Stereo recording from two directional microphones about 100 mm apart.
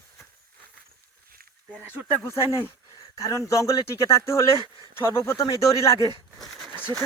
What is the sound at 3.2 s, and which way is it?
Speech, 30° left (ahead or behind).